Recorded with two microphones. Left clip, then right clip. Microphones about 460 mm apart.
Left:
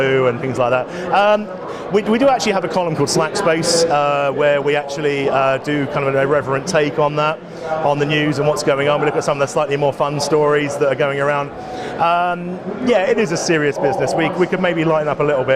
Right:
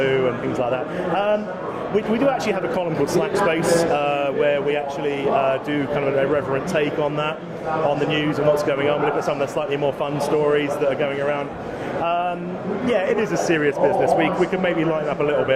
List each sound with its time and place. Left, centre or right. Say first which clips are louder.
0.0 s speech: left 4 dB; left